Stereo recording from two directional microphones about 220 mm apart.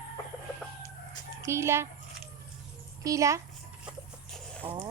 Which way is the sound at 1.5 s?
10° right (ahead or behind).